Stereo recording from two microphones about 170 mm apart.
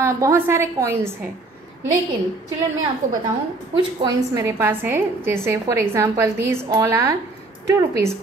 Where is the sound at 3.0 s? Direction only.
45° right (ahead or behind).